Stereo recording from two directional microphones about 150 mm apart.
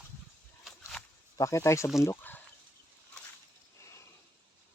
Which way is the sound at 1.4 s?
20° left (ahead or behind).